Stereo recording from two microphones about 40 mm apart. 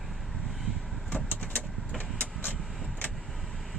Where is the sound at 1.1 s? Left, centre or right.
Left.